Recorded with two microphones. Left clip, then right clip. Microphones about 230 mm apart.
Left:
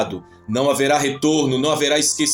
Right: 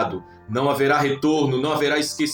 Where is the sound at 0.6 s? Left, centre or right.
Left.